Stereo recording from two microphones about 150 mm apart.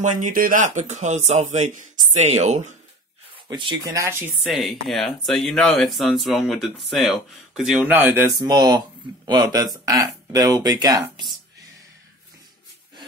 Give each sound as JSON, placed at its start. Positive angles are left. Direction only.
{"t": 0.0, "sound": "speech", "side_deg": -60}
{"t": 3.4, "sound": "speech", "side_deg": -30}
{"t": 4.4, "sound": "speech", "side_deg": 0}
{"t": 8.4, "sound": "speech", "side_deg": -25}